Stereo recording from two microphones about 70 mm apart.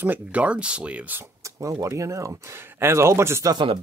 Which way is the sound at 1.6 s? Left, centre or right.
Right.